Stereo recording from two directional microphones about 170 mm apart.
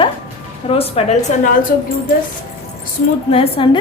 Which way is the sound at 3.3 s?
30° left (ahead or behind).